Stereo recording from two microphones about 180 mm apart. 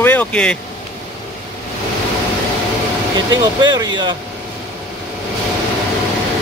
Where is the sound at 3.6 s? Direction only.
25° right (ahead or behind).